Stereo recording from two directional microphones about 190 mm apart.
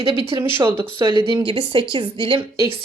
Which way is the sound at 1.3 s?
25° right (ahead or behind).